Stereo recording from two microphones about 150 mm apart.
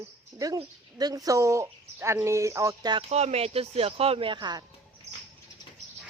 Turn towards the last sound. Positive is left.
turn(degrees=-30)  # may be behind; listen again after turning